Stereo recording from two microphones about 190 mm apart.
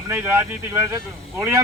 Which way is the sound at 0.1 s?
10° right (ahead or behind).